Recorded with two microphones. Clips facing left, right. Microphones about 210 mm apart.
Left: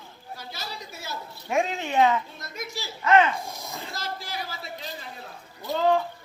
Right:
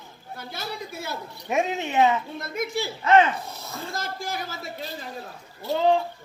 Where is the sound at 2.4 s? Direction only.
55° right (ahead or behind).